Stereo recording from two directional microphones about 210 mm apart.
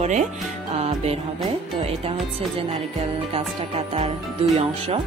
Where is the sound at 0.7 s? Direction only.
30° right (ahead or behind).